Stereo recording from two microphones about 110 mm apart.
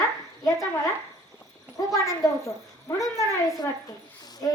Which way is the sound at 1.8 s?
30° left (ahead or behind).